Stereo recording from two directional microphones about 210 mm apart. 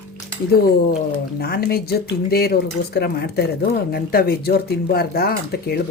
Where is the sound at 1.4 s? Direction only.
45° left (ahead or behind).